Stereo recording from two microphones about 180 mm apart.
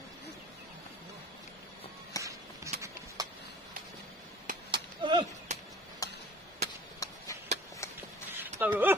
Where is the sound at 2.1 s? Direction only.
20° left (ahead or behind).